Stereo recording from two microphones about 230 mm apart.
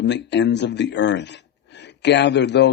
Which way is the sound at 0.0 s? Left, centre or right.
Left.